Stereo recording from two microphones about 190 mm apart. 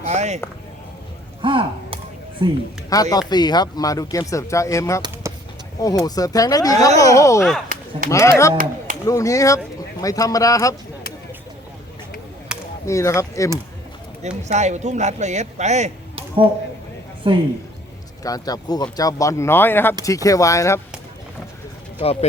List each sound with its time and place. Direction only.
0.0 s a sound: 35° right (ahead or behind)
1.4 s chop: 25° right (ahead or behind)
2.4 s a man's voice: 25° right (ahead or behind)
2.9 s speech: 20° left (ahead or behind)
5.2 s vehicle: 15° right (ahead or behind)
6.1 s speech: 20° left (ahead or behind)
12.8 s speech: 15° left (ahead or behind)
14.2 s a man's voice: 35° right (ahead or behind)
18.2 s speech: 20° left (ahead or behind)
22.0 s speech: 30° left (ahead or behind)